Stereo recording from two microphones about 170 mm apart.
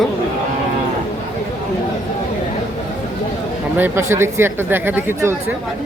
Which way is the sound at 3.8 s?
15° right (ahead or behind).